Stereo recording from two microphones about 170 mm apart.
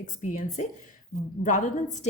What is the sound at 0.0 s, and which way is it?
A woman's voice, 50° left (ahead or behind).